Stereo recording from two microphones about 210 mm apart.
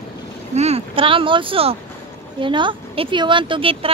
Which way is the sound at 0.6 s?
30° right (ahead or behind).